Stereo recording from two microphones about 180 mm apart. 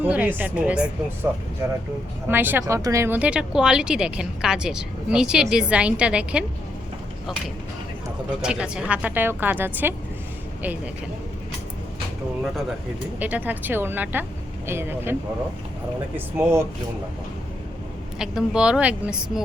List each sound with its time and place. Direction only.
0.0 s speech: 10° right (ahead or behind)
8.4 s speech: 5° right (ahead or behind)
13.1 s speech: 10° right (ahead or behind)
16.1 s speech: 15° right (ahead or behind)
18.2 s speech: 5° right (ahead or behind)